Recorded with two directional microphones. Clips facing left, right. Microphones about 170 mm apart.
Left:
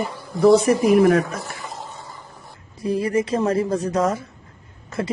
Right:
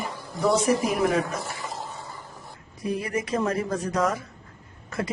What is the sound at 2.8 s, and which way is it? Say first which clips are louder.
Speech: left 7 dB; 30° left (ahead or behind).